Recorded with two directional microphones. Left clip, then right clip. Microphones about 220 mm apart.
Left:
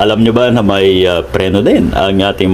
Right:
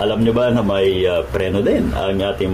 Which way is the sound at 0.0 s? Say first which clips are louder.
Left 6 dB; 45° left (ahead or behind).